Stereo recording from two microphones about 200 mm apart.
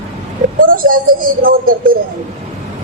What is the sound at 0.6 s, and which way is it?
A woman's voice, 45° right (ahead or behind).